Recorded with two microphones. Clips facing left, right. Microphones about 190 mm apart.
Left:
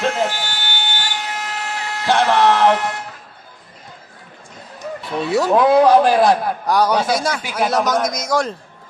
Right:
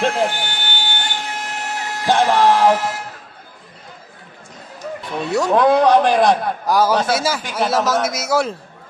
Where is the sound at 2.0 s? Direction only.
15° right (ahead or behind).